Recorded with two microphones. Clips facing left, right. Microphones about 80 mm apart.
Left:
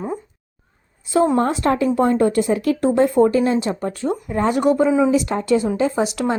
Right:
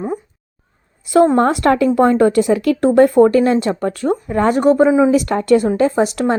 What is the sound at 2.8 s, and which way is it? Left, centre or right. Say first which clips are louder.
Speech: right 6 dB; right.